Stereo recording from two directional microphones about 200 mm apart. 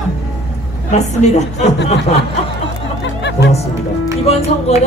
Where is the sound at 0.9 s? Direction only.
35° left (ahead or behind).